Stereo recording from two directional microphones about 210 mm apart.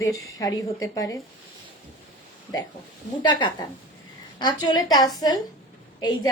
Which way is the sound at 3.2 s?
20° left (ahead or behind).